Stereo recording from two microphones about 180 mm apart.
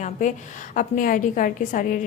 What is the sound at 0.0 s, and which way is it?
A woman's voice, 45° left (ahead or behind).